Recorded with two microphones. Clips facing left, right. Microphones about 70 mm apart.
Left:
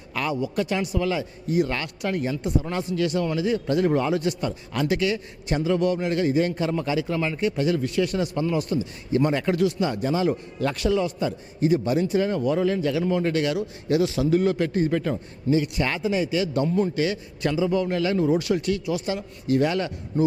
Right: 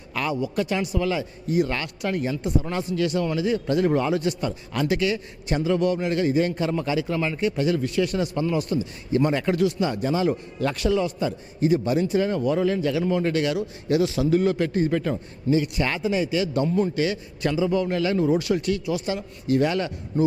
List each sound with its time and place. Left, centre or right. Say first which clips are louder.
0.1 s a man's voice: even; centre